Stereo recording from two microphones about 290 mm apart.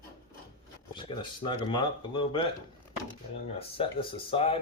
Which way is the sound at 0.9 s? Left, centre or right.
Centre.